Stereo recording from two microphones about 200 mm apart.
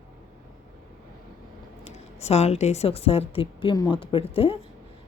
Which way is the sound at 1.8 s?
30° left (ahead or behind).